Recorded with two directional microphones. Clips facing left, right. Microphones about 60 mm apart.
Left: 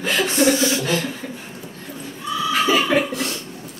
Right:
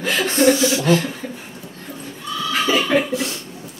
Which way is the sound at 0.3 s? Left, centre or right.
Right.